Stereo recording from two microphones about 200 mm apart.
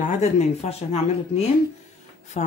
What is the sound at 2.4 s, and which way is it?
Speech, 35° left (ahead or behind).